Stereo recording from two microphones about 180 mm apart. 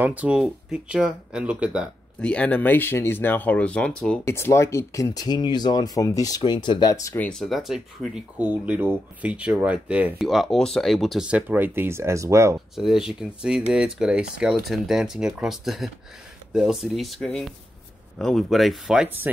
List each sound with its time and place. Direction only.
0.0 s speech: 10° right (ahead or behind)
2.1 s speech: 5° left (ahead or behind)
7.2 s speech: centre (ahead or behind); by 12.5 s 15° right (ahead or behind)
12.5 s speech: centre (ahead or behind)